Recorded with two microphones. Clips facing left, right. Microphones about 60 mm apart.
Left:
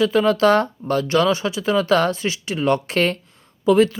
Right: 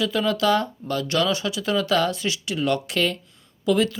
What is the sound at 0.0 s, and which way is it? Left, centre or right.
Speech, left.